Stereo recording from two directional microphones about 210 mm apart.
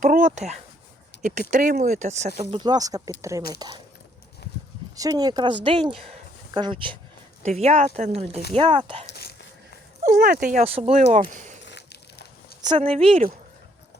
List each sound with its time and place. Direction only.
0.0 s speech: 40° right (ahead or behind)
2.5 s speech: 20° right (ahead or behind)
4.9 s speech: 15° right (ahead or behind)
9.1 s whispering: 50° left (ahead or behind)
10.0 s speech: 40° right (ahead or behind)
10.8 s speech: 30° right (ahead or behind)
11.6 s crushing: 55° left (ahead or behind)
12.6 s speech: 25° right (ahead or behind)